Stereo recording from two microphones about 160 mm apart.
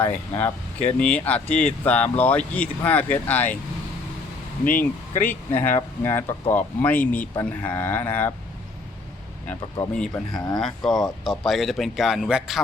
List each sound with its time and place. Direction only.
0.0 s speech: 10° left (ahead or behind)
4.8 s speech: 10° left (ahead or behind)
9.9 s speech: 5° left (ahead or behind)